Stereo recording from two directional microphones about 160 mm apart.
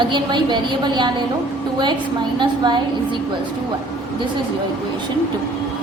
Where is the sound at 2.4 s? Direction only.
30° right (ahead or behind).